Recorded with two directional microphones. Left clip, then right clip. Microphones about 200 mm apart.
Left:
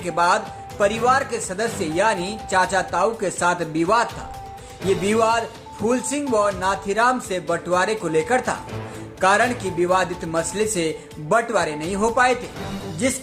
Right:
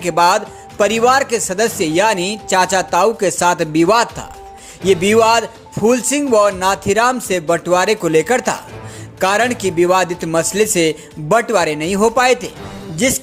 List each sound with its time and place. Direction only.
0.0 s speech: 40° right (ahead or behind)